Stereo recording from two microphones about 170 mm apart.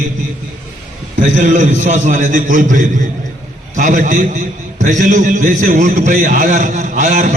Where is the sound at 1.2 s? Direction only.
50° right (ahead or behind).